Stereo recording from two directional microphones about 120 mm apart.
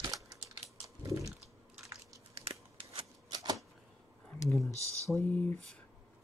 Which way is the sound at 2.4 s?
50° right (ahead or behind).